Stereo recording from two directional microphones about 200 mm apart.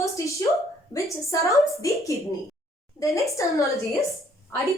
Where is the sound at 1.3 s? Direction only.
15° left (ahead or behind).